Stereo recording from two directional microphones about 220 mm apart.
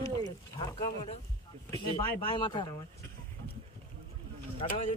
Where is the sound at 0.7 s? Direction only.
30° left (ahead or behind).